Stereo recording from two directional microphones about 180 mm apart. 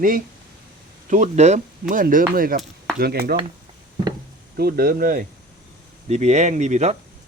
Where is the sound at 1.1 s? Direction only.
40° right (ahead or behind); by 3.4 s 60° right (ahead or behind).